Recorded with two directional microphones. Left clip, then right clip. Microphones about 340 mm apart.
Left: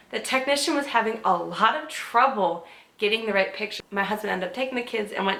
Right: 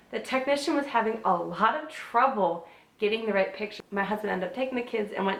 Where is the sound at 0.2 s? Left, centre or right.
Centre.